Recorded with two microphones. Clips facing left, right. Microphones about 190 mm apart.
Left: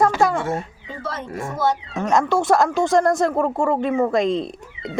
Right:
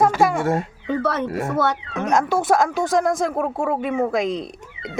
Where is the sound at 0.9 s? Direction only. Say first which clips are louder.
Right 13 dB; 65° right (ahead or behind).